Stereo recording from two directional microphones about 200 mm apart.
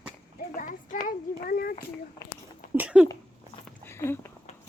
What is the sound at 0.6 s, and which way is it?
A child's voice, 40° left (ahead or behind).